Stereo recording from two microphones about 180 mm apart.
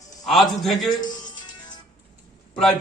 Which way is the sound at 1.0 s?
25° left (ahead or behind).